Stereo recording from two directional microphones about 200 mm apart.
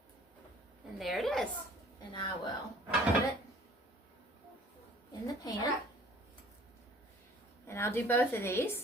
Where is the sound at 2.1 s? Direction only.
25° left (ahead or behind).